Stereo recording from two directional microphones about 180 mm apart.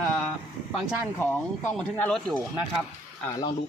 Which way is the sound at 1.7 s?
5° left (ahead or behind).